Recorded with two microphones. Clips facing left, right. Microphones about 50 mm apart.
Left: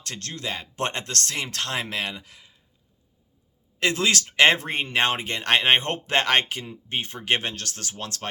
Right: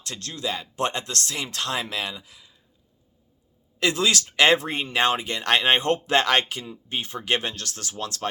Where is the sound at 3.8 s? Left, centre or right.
Left.